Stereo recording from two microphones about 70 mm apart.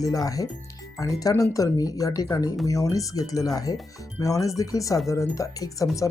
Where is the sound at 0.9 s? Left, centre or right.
Left.